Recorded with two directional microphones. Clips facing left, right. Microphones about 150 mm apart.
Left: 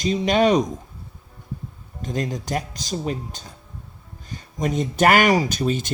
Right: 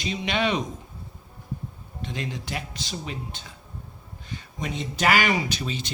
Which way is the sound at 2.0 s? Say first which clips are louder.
Left 6 dB; 40° left (ahead or behind).